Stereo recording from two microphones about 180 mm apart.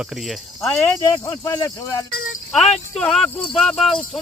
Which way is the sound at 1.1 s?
20° left (ahead or behind).